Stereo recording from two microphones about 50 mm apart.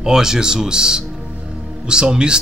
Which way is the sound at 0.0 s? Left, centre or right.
Centre.